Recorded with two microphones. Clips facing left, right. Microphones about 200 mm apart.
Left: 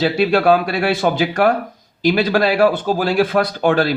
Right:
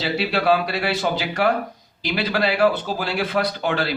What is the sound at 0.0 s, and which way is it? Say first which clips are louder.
Speech: left 7 dB; 50° left (ahead or behind).